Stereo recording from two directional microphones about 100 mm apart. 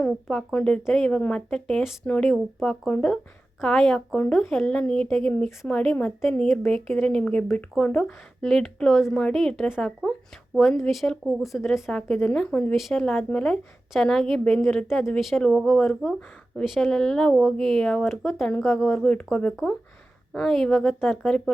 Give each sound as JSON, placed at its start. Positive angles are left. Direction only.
{"t": 0.0, "sound": "a woman's voice", "side_deg": 10}
{"t": 12.7, "sound": "a woman's voice", "side_deg": 0}